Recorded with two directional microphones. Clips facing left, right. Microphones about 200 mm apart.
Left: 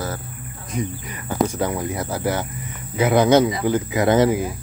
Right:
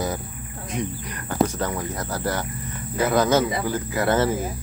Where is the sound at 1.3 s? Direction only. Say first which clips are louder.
Left 2 dB; 10° left (ahead or behind).